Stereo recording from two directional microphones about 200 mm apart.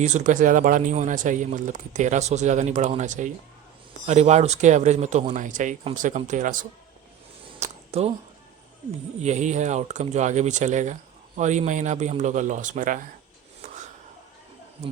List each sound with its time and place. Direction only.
0.0 s speech: 35° right (ahead or behind)
7.9 s speech: 30° right (ahead or behind)
9.2 s speech: 35° right (ahead or behind)